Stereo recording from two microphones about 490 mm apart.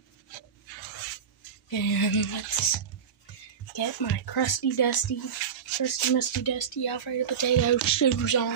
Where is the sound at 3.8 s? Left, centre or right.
Left.